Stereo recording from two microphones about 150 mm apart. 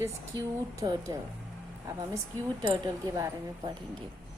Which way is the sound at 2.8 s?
25° right (ahead or behind).